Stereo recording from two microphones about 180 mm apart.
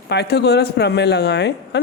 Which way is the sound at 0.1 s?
70° left (ahead or behind).